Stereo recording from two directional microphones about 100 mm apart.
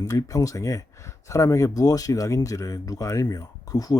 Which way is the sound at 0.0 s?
35° left (ahead or behind).